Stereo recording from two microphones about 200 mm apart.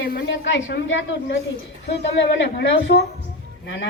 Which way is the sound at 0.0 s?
55° left (ahead or behind).